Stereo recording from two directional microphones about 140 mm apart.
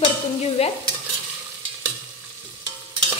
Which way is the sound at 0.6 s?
45° left (ahead or behind).